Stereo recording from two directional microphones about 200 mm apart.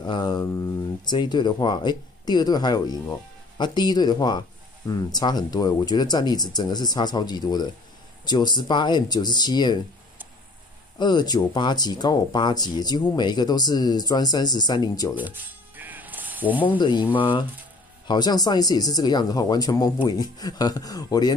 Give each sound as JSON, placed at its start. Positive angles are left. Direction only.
{"t": 0.0, "sound": "a sound", "side_deg": 20}
{"t": 1.0, "sound": "speech", "side_deg": 20}
{"t": 11.0, "sound": "speech", "side_deg": 20}
{"t": 15.1, "sound": "music", "side_deg": -10}
{"t": 16.6, "sound": "speech", "side_deg": 25}